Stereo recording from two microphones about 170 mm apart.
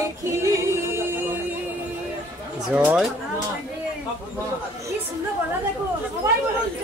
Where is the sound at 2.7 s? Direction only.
5° right (ahead or behind).